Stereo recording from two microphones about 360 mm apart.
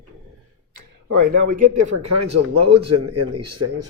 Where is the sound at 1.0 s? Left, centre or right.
Right.